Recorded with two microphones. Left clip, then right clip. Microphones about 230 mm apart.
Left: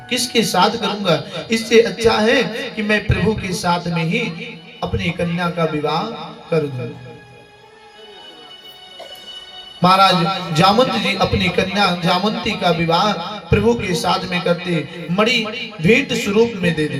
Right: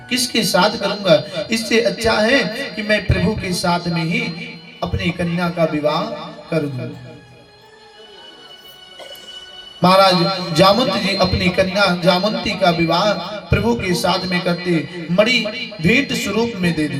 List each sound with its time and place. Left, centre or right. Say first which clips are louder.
0.1 s a man's voice: even; centre
9.8 s a man's voice: even; centre